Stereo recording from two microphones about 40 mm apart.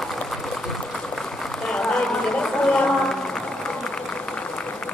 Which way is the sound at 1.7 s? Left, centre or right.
Centre.